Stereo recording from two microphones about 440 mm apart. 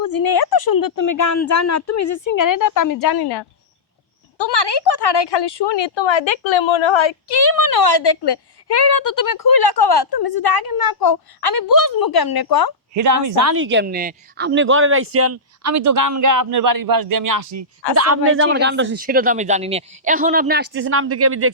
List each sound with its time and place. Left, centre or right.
0.0 s a woman's voice: left
12.9 s speech: right